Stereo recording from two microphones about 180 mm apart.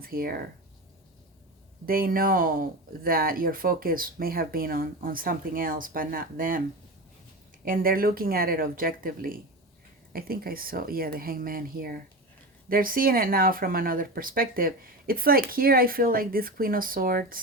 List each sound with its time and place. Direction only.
0.0 s speech: 55° right (ahead or behind)
1.9 s speech: 55° right (ahead or behind)
7.6 s speech: 50° right (ahead or behind)